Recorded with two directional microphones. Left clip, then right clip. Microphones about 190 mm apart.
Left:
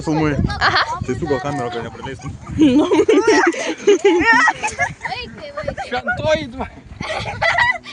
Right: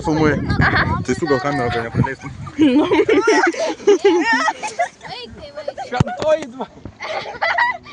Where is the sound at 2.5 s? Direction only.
5° left (ahead or behind).